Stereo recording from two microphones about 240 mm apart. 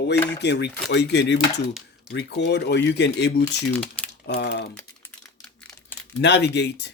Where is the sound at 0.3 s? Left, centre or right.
Left.